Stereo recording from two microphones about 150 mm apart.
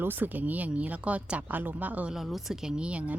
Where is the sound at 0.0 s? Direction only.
15° right (ahead or behind).